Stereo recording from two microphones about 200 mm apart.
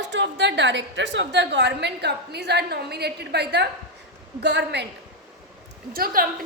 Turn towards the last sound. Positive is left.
turn(degrees=-45)  # may be behind; listen again after turning